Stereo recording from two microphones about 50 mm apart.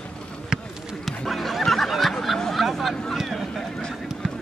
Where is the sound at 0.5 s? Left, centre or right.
Centre.